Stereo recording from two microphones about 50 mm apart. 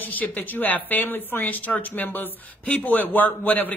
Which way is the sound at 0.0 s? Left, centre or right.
Left.